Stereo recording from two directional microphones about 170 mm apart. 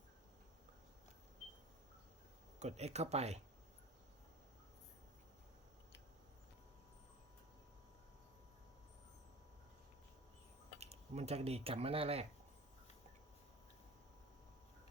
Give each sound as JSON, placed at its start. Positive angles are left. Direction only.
{"t": 2.6, "sound": "speech", "side_deg": -40}
{"t": 10.8, "sound": "speech", "side_deg": -40}